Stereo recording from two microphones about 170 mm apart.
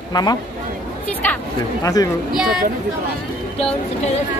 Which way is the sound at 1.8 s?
20° left (ahead or behind).